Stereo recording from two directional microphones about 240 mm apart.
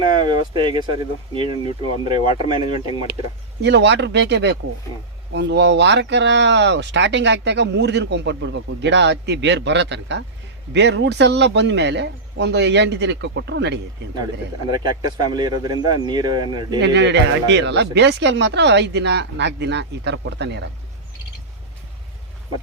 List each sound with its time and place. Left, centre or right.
0.1 s a sound: left
0.5 s speech: centre
2.1 s speech: left
3.6 s speech: right
14.7 s speech: centre
16.8 s speech: right